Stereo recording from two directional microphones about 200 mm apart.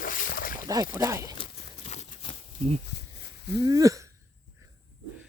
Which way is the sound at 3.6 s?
20° right (ahead or behind).